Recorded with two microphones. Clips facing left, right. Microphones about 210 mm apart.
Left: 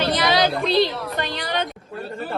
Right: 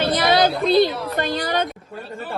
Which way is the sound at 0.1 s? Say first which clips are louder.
Right 4 dB; 50° right (ahead or behind).